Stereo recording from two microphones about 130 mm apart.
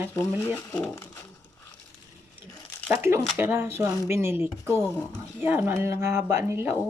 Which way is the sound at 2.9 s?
20° right (ahead or behind).